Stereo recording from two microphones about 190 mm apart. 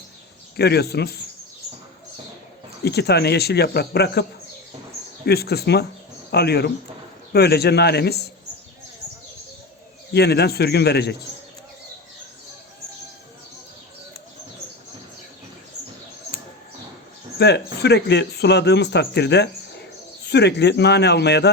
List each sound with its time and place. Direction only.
0.5 s speech: 60° left (ahead or behind)
2.8 s speech: 60° left (ahead or behind)
10.1 s speech: 60° left (ahead or behind)
17.3 s speech: 60° left (ahead or behind)